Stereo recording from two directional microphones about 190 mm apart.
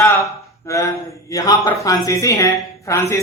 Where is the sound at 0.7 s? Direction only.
15° left (ahead or behind).